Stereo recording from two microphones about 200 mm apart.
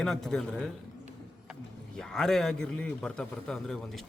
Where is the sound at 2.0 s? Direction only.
Centre (ahead or behind).